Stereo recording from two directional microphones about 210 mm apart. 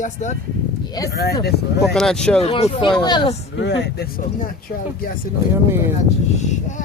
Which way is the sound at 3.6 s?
55° left (ahead or behind).